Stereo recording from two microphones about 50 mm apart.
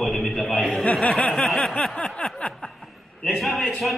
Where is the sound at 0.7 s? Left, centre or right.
Left.